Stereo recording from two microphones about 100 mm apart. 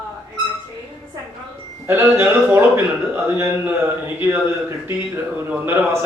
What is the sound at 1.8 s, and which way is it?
Speech, 20° right (ahead or behind).